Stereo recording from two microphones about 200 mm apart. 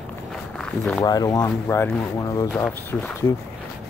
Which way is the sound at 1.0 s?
20° left (ahead or behind).